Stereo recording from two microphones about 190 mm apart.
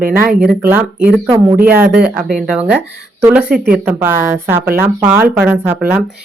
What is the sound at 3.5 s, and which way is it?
Speech, 50° right (ahead or behind).